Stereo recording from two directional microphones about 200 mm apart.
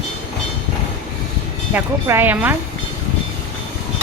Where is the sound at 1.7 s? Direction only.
10° right (ahead or behind).